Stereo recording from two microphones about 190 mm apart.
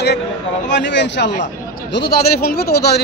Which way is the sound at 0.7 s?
65° left (ahead or behind).